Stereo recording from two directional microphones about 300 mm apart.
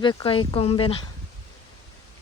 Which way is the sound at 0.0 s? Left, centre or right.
Centre.